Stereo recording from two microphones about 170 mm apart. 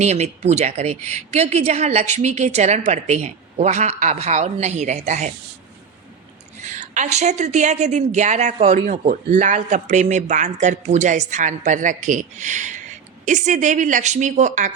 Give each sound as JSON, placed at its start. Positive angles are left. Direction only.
{"t": 0.0, "sound": "speech", "side_deg": -40}
{"t": 6.6, "sound": "a woman's voice", "side_deg": -45}